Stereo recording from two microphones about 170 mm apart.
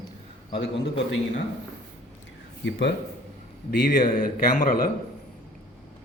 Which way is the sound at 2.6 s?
90° left.